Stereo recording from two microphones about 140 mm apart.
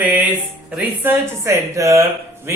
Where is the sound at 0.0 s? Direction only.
10° right (ahead or behind).